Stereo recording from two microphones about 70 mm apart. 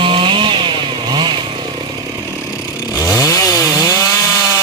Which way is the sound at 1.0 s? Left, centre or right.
Right.